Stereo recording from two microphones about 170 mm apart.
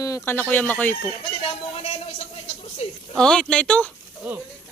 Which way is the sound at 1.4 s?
35° left (ahead or behind).